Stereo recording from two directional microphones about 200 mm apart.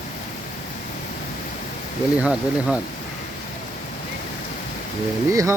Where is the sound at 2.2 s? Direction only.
5° right (ahead or behind).